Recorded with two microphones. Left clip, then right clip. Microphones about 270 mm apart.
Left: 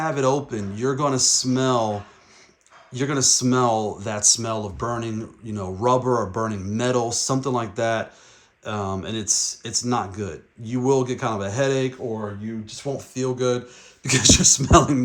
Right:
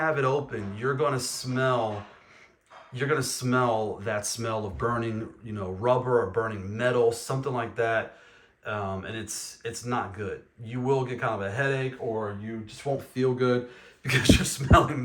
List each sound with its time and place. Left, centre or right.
0.0 s speech: centre
2.9 s speech: centre
12.6 s speech: centre